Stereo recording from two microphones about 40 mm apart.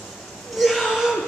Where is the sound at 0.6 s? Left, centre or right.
Centre.